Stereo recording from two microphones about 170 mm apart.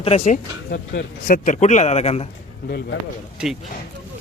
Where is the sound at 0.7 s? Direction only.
55° left (ahead or behind).